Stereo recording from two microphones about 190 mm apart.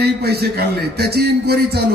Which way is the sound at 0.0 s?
55° right (ahead or behind).